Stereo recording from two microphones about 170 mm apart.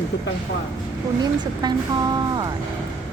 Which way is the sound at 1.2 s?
25° right (ahead or behind).